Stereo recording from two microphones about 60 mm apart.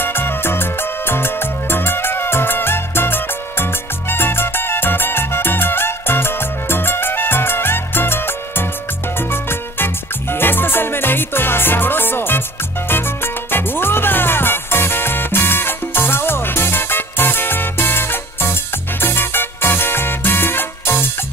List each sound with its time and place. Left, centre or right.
0.0 s music: left